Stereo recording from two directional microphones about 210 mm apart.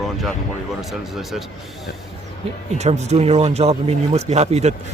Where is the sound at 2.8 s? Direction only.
30° right (ahead or behind).